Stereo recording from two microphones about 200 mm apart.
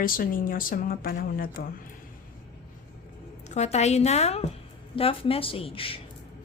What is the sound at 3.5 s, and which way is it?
A woman's voice, 35° left (ahead or behind).